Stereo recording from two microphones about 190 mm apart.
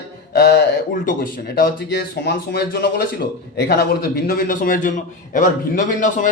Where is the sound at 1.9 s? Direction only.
60° left (ahead or behind).